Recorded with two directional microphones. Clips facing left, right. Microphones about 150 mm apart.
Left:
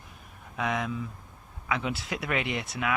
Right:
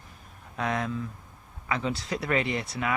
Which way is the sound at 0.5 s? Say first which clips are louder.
Right 1 dB; centre (ahead or behind).